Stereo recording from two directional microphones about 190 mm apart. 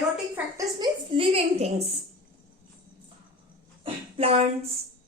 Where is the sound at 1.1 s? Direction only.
30° right (ahead or behind).